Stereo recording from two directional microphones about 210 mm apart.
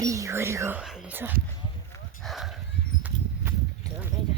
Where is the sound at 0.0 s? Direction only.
15° right (ahead or behind).